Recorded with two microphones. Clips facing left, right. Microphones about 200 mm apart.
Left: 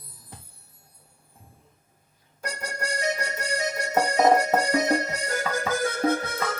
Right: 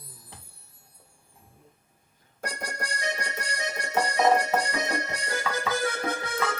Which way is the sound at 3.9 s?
40° left (ahead or behind).